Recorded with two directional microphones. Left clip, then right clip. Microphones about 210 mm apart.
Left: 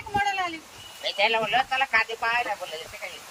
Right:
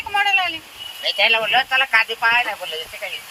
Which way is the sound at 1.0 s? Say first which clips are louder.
Right 7 dB; 10° left (ahead or behind).